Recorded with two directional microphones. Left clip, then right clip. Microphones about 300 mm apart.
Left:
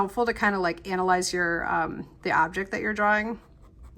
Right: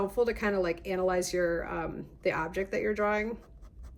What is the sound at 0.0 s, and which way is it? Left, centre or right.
Speech, centre.